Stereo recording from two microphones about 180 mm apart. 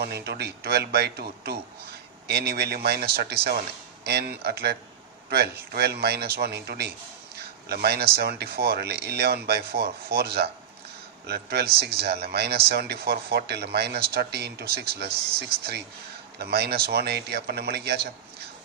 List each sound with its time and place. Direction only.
0.0 s speech: 65° right (ahead or behind)